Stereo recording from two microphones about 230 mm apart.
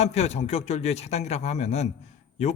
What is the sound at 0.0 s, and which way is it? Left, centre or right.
A man's voice, left.